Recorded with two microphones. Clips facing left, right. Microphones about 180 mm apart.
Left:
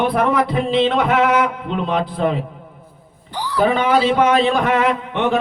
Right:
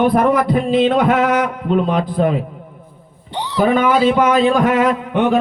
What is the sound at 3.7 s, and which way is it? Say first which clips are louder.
A man's voice: right 4 dB; 45° right (ahead or behind).